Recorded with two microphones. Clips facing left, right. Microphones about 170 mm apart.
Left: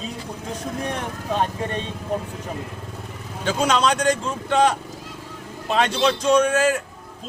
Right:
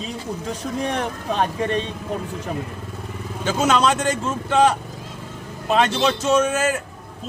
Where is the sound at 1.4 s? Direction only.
90° right.